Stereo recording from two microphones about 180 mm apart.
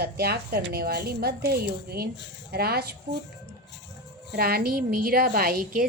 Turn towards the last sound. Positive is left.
turn(degrees=-55)  # may be behind; listen again after turning